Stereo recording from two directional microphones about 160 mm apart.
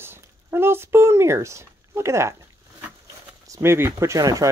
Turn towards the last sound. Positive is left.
turn(degrees=-20)  # may be behind; listen again after turning